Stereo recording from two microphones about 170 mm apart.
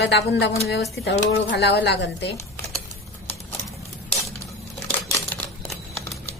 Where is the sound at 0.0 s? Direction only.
80° left.